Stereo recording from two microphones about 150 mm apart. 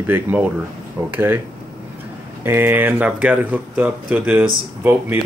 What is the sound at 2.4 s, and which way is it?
Speech, 15° right (ahead or behind).